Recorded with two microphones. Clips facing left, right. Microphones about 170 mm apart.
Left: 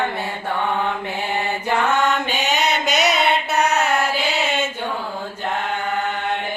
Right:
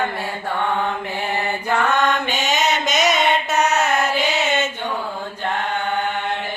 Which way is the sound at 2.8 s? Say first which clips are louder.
Even; 65° left (ahead or behind).